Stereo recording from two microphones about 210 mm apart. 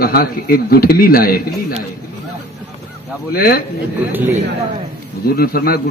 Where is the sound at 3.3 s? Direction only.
45° left (ahead or behind).